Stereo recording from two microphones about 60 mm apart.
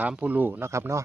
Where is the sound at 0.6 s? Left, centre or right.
Right.